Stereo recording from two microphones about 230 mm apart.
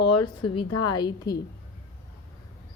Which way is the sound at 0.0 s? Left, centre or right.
Left.